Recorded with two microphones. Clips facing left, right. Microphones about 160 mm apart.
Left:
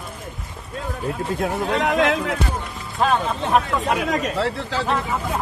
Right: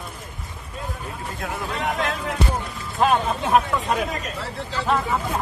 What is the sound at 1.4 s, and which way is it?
Speech, 90° left.